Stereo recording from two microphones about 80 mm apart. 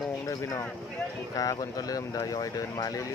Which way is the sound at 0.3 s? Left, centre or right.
Left.